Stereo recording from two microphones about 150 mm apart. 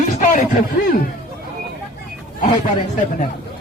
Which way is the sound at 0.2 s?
60° left (ahead or behind).